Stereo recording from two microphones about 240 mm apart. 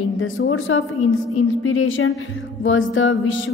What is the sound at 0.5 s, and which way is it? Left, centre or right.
A woman's voice, left.